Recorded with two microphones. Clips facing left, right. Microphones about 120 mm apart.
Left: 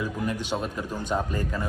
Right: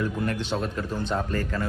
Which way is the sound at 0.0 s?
10° left (ahead or behind).